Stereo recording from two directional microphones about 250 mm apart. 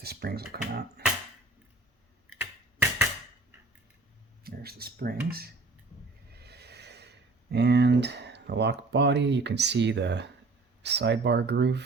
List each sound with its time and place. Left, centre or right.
0.0 s speech: right
2.4 s finger snapping: centre
4.4 s speech: right